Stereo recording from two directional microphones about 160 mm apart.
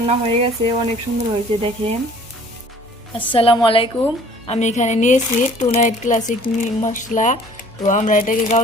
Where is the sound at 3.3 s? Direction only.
35° left (ahead or behind).